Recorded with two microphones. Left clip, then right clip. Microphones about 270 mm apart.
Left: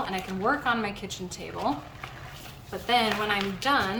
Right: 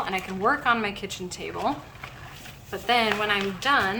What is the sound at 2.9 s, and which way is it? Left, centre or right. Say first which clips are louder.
Speech: right 2 dB; centre.